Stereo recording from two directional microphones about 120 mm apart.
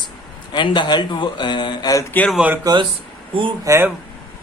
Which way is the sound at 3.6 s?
25° right (ahead or behind).